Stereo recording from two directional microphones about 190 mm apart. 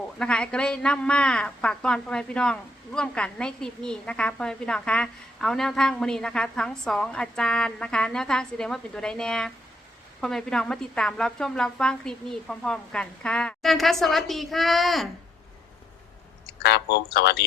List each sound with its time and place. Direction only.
0.2 s a woman's voice: 5° left (ahead or behind)
16.6 s speech: 60° left (ahead or behind)